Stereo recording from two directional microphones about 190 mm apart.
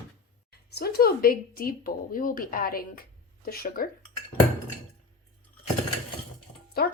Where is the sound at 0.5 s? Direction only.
55° left (ahead or behind).